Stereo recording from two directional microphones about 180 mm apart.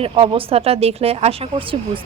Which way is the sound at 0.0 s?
30° right (ahead or behind).